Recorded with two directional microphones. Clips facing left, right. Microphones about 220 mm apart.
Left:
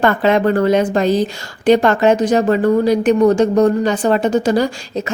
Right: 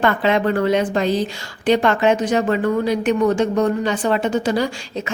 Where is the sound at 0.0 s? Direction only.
45° left (ahead or behind).